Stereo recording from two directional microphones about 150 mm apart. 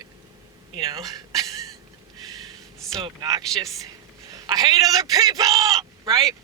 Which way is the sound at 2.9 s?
30° right (ahead or behind).